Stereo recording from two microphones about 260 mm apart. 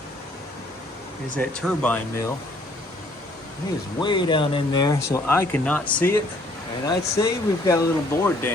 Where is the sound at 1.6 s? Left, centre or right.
Centre.